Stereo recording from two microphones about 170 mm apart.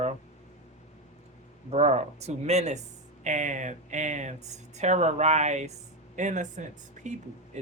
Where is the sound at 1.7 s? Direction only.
40° right (ahead or behind).